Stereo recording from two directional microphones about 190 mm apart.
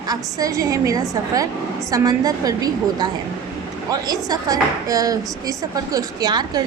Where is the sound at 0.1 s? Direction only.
20° right (ahead or behind).